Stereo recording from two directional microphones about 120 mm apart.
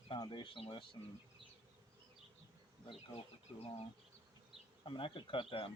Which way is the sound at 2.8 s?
45° left (ahead or behind).